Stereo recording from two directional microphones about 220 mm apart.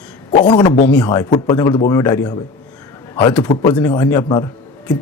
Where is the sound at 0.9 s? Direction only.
5° left (ahead or behind).